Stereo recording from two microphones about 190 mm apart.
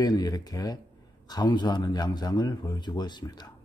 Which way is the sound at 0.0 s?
20° left (ahead or behind).